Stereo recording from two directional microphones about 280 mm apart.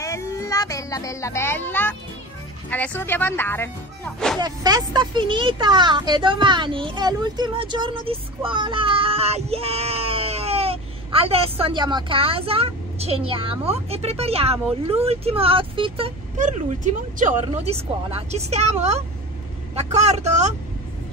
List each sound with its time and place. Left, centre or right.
0.0 s a child's voice: centre
4.4 s a child's voice: centre